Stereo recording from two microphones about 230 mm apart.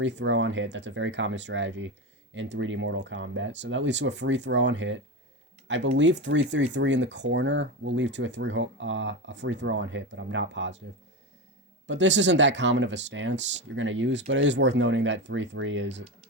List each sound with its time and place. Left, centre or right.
0.0 s speech: right
11.9 s speech: right